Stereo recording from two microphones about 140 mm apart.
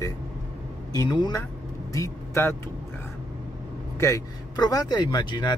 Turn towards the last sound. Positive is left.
turn(degrees=30)  # may be behind; listen again after turning